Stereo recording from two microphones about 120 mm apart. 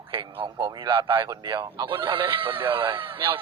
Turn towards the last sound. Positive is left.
turn(degrees=-45)  # may be behind; listen again after turning